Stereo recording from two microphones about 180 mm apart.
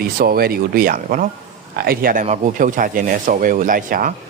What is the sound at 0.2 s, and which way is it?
Speech, 55° right (ahead or behind).